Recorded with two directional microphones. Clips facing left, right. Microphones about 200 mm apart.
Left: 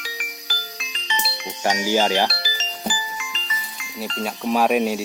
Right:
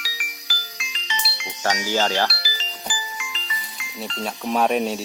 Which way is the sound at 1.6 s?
15° left (ahead or behind).